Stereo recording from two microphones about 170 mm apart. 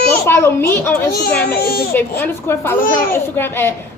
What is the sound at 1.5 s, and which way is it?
Speech, 60° left (ahead or behind).